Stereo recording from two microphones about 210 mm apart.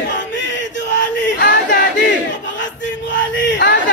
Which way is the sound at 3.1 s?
55° left (ahead or behind).